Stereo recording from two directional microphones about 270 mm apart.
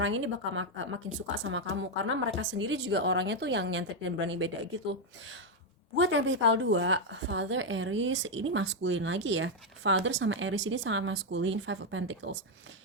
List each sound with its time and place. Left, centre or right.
0.0 s a woman's voice: right
6.0 s a woman's voice: right